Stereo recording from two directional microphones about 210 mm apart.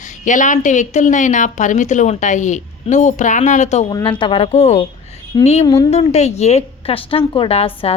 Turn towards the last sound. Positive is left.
turn(degrees=25)  # may be behind; listen again after turning